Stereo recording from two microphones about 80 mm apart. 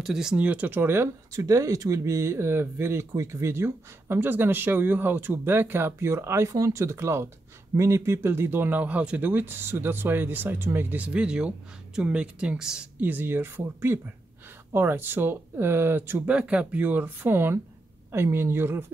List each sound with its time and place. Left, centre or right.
0.0 s speech: centre
0.5 s speech: right
1.3 s speech: right; by 12.8 s centre
13.0 s speech: right
16.3 s speech: centre